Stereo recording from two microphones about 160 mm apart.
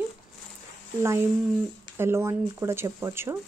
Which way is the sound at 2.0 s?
15° right (ahead or behind).